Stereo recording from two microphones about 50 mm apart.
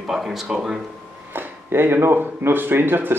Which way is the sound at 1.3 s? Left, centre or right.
Right.